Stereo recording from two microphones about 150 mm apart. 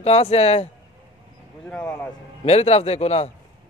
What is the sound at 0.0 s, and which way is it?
Speech, 45° left (ahead or behind).